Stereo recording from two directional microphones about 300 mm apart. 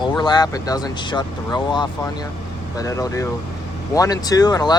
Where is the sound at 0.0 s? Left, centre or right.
Centre.